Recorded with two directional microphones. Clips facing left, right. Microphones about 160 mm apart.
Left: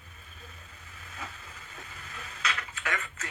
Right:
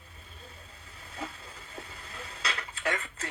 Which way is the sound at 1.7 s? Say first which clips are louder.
Right 2 dB; 35° right (ahead or behind).